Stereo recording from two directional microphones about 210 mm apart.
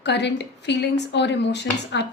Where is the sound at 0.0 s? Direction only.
55° left (ahead or behind).